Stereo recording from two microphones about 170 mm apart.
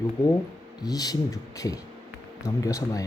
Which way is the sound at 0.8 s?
20° left (ahead or behind).